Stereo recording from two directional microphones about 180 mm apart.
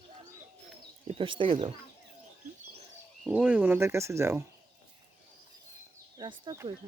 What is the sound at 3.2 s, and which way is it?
Speech, 5° right (ahead or behind).